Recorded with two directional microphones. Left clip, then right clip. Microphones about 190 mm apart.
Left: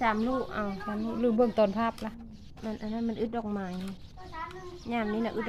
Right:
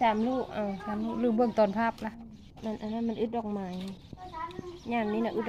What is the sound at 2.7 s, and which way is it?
Speech, centre (ahead or behind).